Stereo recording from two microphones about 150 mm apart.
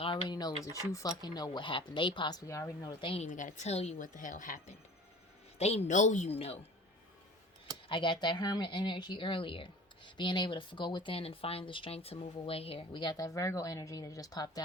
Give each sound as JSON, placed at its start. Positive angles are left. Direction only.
{"t": 0.0, "sound": "a sound", "side_deg": 35}
{"t": 0.6, "sound": "speech", "side_deg": 20}
{"t": 3.0, "sound": "speech", "side_deg": 35}
{"t": 3.2, "sound": "a woman's voice", "side_deg": 60}
{"t": 4.0, "sound": "speech", "side_deg": 60}
{"t": 5.5, "sound": "a woman's voice", "side_deg": 45}
{"t": 7.9, "sound": "speech", "side_deg": 30}